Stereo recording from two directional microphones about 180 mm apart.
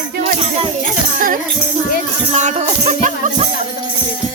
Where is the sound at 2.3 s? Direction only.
40° right (ahead or behind).